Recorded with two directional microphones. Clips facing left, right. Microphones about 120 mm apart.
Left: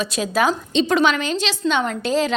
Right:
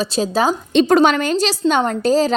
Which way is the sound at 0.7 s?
50° right (ahead or behind).